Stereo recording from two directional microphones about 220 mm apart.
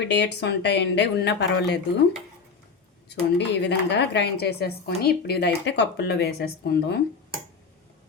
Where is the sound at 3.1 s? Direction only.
50° left (ahead or behind).